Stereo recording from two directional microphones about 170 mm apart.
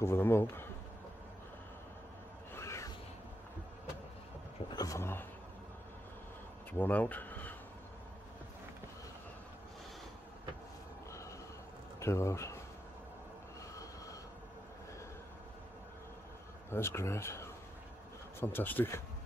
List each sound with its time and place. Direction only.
0.0 s speech: 15° left (ahead or behind)
2.5 s music: 15° left (ahead or behind)
4.7 s speech: 20° left (ahead or behind)
6.7 s speech: 10° left (ahead or behind)
12.0 s speech: 15° left (ahead or behind)
16.7 s speech: 15° left (ahead or behind)